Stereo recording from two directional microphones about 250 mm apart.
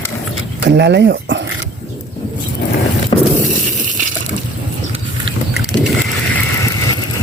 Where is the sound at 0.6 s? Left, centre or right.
Right.